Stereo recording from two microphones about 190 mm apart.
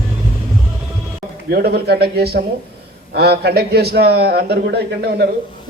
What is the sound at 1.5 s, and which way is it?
A man's voice, 55° right (ahead or behind).